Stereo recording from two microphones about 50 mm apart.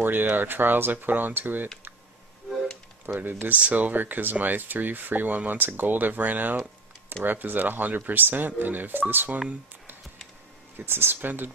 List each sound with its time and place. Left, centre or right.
0.0 s speech: right
3.2 s speech: right
10.9 s speech: right